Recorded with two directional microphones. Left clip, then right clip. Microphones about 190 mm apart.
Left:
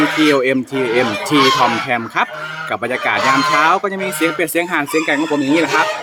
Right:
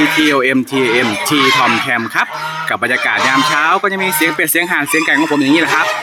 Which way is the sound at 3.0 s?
5° right (ahead or behind).